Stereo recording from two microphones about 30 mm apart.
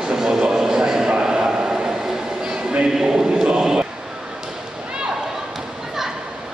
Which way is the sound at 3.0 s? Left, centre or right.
Right.